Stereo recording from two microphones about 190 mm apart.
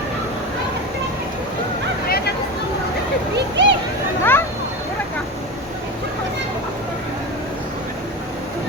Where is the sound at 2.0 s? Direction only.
55° left (ahead or behind).